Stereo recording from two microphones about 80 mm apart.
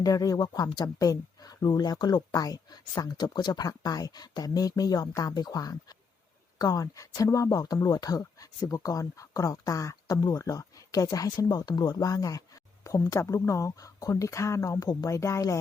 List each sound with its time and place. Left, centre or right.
0.0 s speech: left